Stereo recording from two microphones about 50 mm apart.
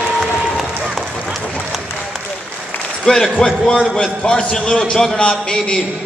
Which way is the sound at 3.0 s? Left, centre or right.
Centre.